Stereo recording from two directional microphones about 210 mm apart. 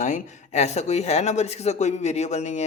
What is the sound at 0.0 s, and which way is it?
Speech, 35° left (ahead or behind).